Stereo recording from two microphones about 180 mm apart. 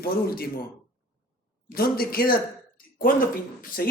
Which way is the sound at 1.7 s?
55° left (ahead or behind).